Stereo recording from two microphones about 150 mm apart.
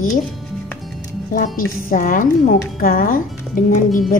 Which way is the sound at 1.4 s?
65° left (ahead or behind).